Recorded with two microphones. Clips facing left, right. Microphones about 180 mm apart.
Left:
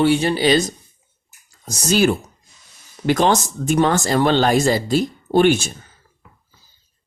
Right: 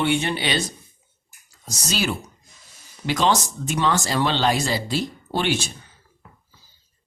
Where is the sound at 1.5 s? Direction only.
50° left (ahead or behind).